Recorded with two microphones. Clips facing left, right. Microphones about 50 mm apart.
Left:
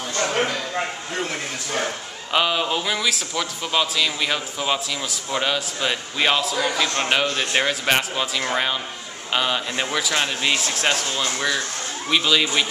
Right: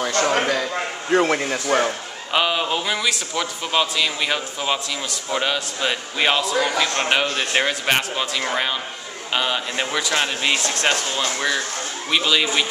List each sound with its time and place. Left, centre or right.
0.0 s a sound: right
1.1 s speech: right
2.3 s speech: centre